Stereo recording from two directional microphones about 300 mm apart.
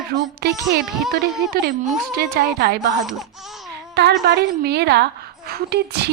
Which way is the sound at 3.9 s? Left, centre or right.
Right.